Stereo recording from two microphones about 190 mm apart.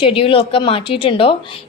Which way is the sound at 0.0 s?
30° left (ahead or behind).